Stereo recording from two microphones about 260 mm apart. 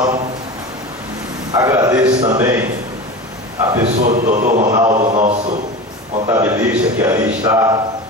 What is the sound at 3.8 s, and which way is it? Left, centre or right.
Speech, right.